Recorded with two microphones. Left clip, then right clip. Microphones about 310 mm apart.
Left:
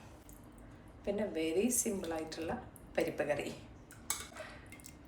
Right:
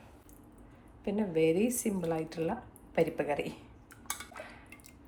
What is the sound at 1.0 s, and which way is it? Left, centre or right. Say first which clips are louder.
Speech: right 7 dB; right.